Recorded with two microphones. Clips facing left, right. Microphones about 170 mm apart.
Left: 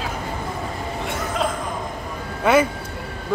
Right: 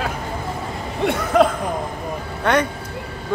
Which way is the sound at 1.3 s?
60° right (ahead or behind).